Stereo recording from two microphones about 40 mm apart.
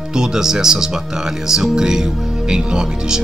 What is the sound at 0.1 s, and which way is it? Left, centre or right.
Speech, centre.